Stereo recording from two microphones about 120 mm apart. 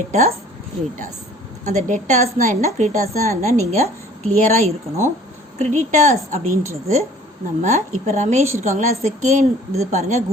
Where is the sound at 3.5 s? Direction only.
65° right (ahead or behind).